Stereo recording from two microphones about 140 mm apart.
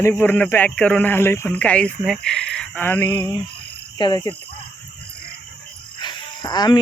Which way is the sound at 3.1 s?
35° left (ahead or behind).